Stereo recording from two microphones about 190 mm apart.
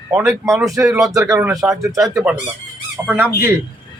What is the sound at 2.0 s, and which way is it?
A man's voice, 5° right (ahead or behind).